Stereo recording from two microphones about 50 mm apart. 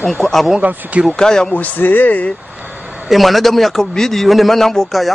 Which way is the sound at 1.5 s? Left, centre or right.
Left.